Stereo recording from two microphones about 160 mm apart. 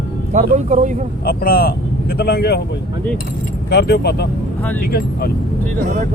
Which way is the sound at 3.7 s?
90° left.